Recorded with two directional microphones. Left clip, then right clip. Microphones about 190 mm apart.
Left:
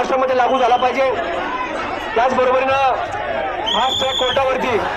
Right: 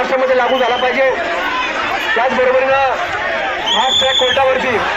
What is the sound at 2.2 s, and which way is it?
Speech, 40° left (ahead or behind).